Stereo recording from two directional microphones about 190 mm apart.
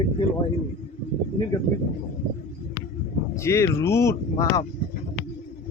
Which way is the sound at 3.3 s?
15° left (ahead or behind).